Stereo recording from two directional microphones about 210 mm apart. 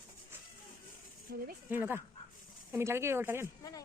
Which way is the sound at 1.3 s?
45° right (ahead or behind).